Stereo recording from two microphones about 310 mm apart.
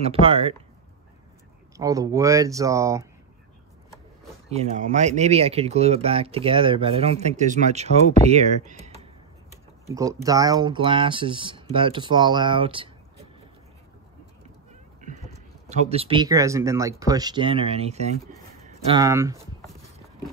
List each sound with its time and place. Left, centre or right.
0.0 s speech: centre
1.8 s speech: centre
4.5 s speech: right
9.8 s speech: centre
15.0 s cat: right
15.7 s speech: right